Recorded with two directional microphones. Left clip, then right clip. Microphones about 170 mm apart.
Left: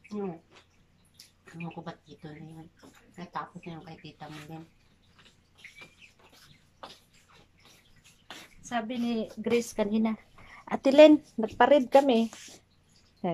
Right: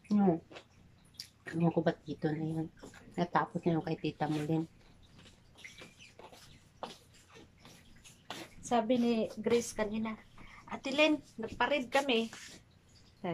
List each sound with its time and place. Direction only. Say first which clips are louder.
0.5 s a sound: right 5 dB; 50° right (ahead or behind)
1.1 s drip: right 7 dB; 55° right (ahead or behind)
3.2 s speech: right 6 dB; 55° right (ahead or behind)
8.6 s a woman's voice: right 2 dB; 25° right (ahead or behind)
9.0 s speech: even; 15° right (ahead or behind)
9.4 s a woman's voice: left 6 dB; 5° left (ahead or behind)
9.8 s speech: left 7 dB; 30° left (ahead or behind)
10.6 s a woman's voice: left 13 dB; 55° left (ahead or behind)
11.3 s a woman's voice: left 11 dB; 45° left (ahead or behind)
13.2 s a sound: left 6 dB; 20° left (ahead or behind)